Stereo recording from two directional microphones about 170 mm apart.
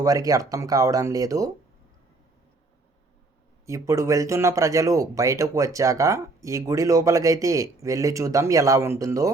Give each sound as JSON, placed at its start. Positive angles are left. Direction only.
{"t": 0.0, "sound": "speech", "side_deg": -20}
{"t": 3.7, "sound": "speech", "side_deg": -20}